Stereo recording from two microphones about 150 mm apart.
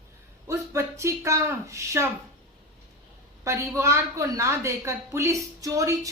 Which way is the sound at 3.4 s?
20° right (ahead or behind).